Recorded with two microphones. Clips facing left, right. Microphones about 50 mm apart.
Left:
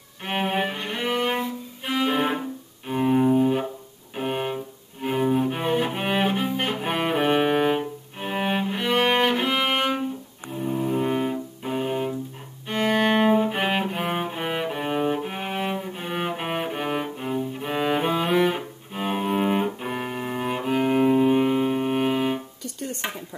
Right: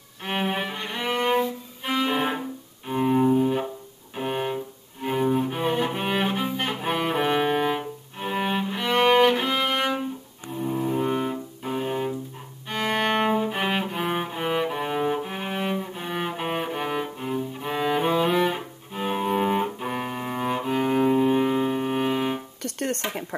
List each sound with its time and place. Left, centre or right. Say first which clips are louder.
0.2 s music: left 2 dB; centre
2.9 s cello: left 1 dB; centre
4.2 s music: even; centre
5.0 s cello: left 1 dB; centre
10.5 s music: left 1 dB; centre
12.6 s cello: left 3 dB; centre
22.6 s music: right 5 dB; right